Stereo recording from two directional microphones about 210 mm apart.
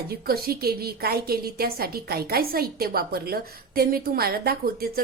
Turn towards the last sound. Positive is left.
turn(degrees=-45)  # may be behind; listen again after turning